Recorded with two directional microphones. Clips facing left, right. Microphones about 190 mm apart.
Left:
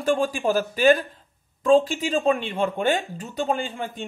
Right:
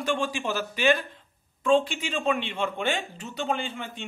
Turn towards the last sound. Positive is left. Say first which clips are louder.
# left 4 dB
turn(degrees=40)  # may be behind; listen again after turning